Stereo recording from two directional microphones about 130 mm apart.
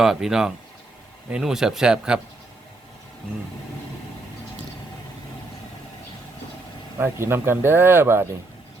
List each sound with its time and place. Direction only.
0.0 s speech: 5° right (ahead or behind)
7.0 s speech: 20° right (ahead or behind)